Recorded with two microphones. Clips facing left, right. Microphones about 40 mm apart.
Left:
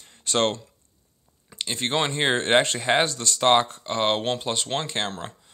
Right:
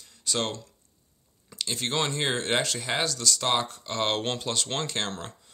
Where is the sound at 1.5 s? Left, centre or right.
Left.